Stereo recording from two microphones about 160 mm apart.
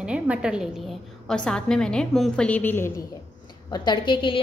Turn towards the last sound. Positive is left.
turn(degrees=30)  # may be behind; listen again after turning